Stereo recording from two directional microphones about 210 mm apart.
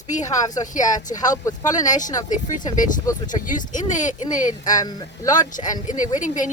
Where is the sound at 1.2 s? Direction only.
15° left (ahead or behind).